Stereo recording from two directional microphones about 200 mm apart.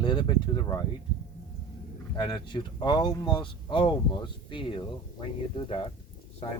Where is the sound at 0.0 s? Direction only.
20° left (ahead or behind).